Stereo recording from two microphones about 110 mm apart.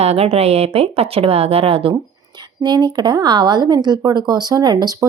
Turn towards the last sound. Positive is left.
turn(degrees=-35)  # may be behind; listen again after turning